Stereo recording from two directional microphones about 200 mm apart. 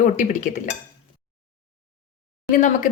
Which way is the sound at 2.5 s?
40° left (ahead or behind).